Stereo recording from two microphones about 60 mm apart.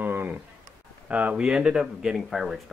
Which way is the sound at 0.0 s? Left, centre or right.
Right.